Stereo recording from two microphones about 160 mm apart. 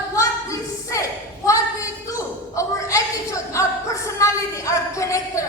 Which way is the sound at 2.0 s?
20° left (ahead or behind).